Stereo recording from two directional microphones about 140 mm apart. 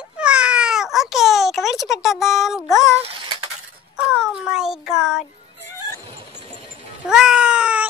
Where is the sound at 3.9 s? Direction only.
5° right (ahead or behind).